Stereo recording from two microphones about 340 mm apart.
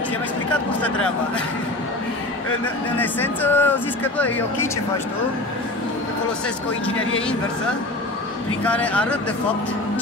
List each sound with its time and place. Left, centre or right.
3.0 s speech: centre
8.6 s speech: centre